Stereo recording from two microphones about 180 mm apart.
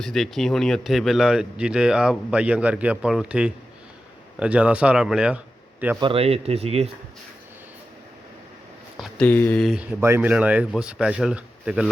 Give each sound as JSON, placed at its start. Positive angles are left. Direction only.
{"t": 0.0, "sound": "speech", "side_deg": 0}
{"t": 6.0, "sound": "speech", "side_deg": -30}
{"t": 9.0, "sound": "speech", "side_deg": 5}
{"t": 9.6, "sound": "speech", "side_deg": -5}